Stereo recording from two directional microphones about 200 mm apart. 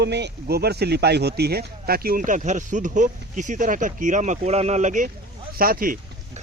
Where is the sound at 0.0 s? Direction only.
60° right (ahead or behind).